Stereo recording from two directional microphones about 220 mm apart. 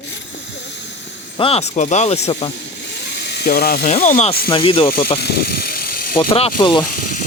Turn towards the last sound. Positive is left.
turn(degrees=35)  # may be behind; listen again after turning